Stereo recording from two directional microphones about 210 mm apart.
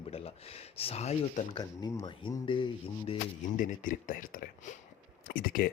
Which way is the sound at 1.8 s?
20° left (ahead or behind).